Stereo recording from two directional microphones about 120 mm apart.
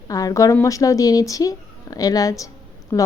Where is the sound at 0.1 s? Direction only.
30° left (ahead or behind).